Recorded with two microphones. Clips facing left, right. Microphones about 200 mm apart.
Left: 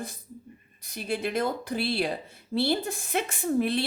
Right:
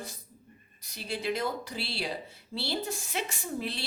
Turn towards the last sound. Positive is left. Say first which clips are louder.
# left 10 dB
turn(degrees=55)  # may be behind; listen again after turning